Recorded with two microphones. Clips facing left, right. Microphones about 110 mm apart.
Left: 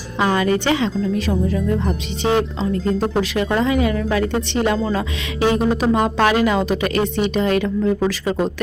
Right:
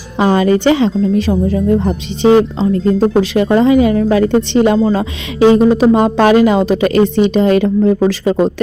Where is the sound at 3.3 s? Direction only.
25° right (ahead or behind).